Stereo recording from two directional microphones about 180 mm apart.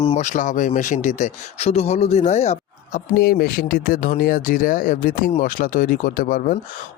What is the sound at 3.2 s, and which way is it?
Speech, 60° left (ahead or behind).